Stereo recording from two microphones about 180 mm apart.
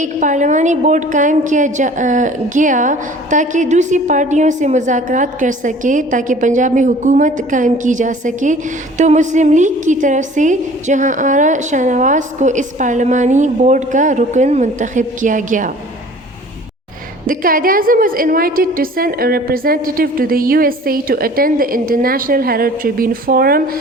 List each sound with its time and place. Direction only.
0.0 s a woman's voice: 45° right (ahead or behind)
17.2 s a woman's voice: 50° right (ahead or behind)